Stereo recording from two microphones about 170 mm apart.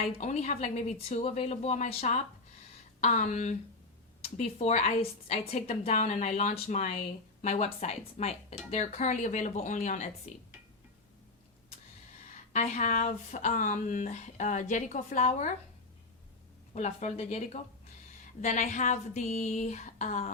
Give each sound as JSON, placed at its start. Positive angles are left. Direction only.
{"t": 0.2, "sound": "speech", "side_deg": 45}
{"t": 12.5, "sound": "speech", "side_deg": 45}
{"t": 16.7, "sound": "speech", "side_deg": 40}